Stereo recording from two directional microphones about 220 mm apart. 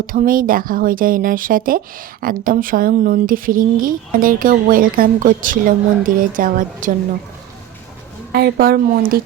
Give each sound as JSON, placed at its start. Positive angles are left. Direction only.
{"t": 0.0, "sound": "speech", "side_deg": -40}
{"t": 8.3, "sound": "speech", "side_deg": -45}